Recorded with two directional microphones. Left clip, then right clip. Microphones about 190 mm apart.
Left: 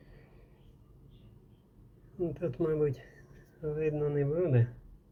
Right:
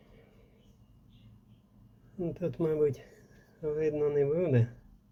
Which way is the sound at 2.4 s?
15° right (ahead or behind).